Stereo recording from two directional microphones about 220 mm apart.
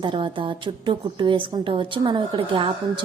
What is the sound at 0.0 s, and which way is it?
A woman's voice, 20° right (ahead or behind).